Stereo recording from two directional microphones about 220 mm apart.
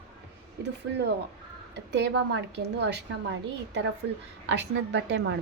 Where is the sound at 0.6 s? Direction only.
50° right (ahead or behind).